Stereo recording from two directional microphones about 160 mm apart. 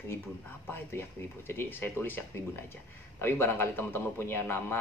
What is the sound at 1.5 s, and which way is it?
Speech, 15° left (ahead or behind).